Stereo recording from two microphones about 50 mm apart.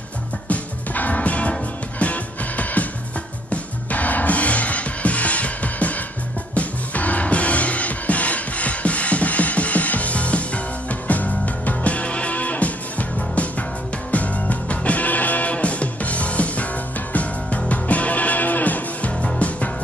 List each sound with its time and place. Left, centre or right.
0.5 s music: left
3.9 s music: left